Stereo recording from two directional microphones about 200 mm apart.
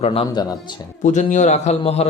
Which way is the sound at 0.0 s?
30° left (ahead or behind).